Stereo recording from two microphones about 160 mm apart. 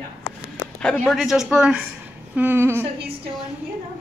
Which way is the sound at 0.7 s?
5° left (ahead or behind).